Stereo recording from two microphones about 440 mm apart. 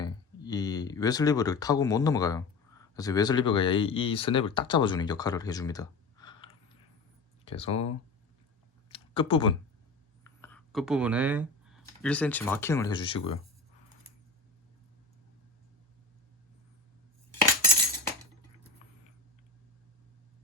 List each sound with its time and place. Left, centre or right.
0.0 s speech: centre
8.9 s a sound: centre
10.2 s speech: centre